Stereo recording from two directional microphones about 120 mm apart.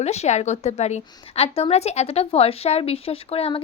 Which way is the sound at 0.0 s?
65° left (ahead or behind).